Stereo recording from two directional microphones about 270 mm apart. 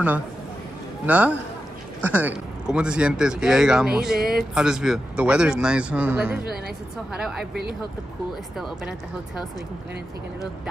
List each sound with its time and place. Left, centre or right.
1.0 s speech: centre
8.5 s speech: centre